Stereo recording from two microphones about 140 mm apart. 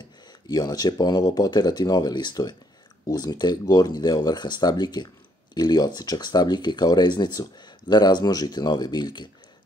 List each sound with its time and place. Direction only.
0.5 s speech: 25° left (ahead or behind)